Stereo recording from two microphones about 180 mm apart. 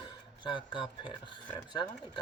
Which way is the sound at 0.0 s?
25° left (ahead or behind).